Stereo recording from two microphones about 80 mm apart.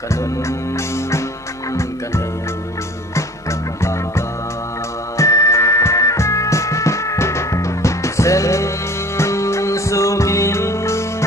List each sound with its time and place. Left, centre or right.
0.1 s music: left
5.1 s music: left